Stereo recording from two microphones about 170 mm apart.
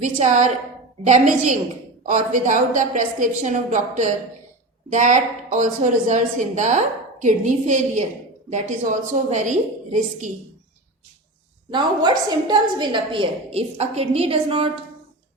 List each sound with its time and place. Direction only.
0.2 s a woman's voice: 45° right (ahead or behind)
11.7 s a woman's voice: 25° right (ahead or behind)